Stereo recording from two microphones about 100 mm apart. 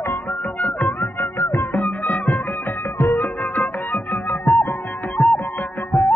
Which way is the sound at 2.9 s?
25° left (ahead or behind).